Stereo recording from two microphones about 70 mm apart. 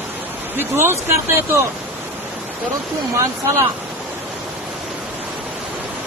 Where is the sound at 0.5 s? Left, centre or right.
Right.